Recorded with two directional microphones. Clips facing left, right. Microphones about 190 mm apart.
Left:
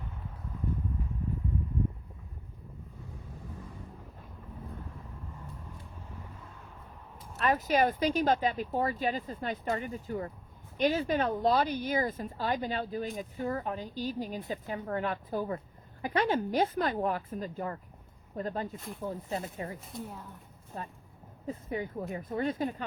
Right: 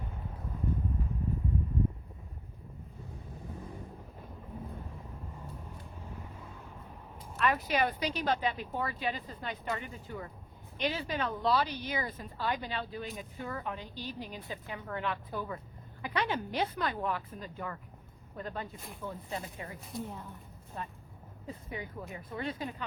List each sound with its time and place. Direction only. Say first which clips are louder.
7.3 s speech: left 3 dB; 40° left (ahead or behind)
19.9 s a woman's voice: right 1 dB; centre (ahead or behind)
20.7 s speech: left 1 dB; 40° left (ahead or behind)